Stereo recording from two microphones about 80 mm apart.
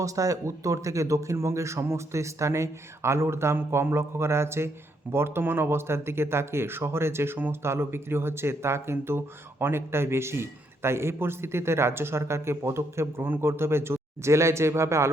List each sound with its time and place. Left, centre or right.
0.0 s speech: right